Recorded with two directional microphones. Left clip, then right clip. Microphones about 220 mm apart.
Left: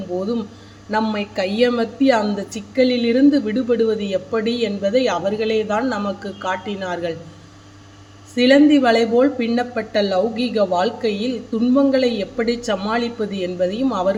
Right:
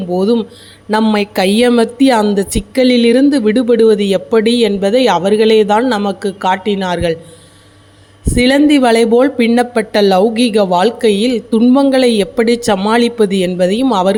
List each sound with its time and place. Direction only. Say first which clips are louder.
0.2 s a woman's voice: right 10 dB; 40° right (ahead or behind)
8.4 s a woman's voice: right 3 dB; 45° right (ahead or behind)